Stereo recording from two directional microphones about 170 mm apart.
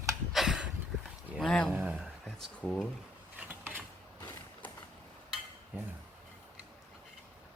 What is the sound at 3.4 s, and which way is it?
Mechanisms, 10° right (ahead or behind).